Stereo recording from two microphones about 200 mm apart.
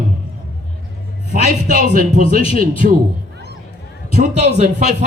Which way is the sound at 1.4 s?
40° right (ahead or behind).